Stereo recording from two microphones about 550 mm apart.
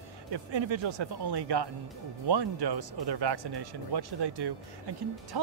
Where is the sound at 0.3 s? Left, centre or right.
Right.